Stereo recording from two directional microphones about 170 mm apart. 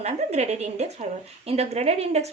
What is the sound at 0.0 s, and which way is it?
Speech, 40° right (ahead or behind).